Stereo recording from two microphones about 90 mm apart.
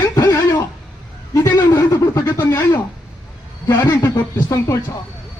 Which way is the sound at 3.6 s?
35° left (ahead or behind).